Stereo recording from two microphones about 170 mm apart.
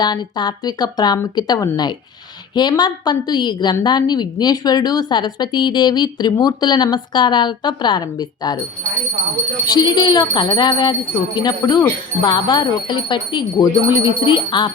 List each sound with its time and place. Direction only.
0.0 s a woman's voice: 25° left (ahead or behind)
9.6 s a woman's voice: 25° left (ahead or behind)